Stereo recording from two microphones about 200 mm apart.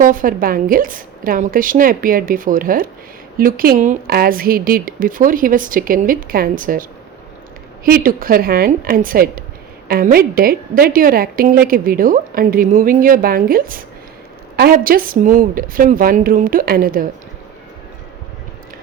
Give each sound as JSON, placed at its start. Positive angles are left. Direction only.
{"t": 0.0, "sound": "a woman's voice", "side_deg": -40}
{"t": 7.9, "sound": "a woman's voice", "side_deg": -45}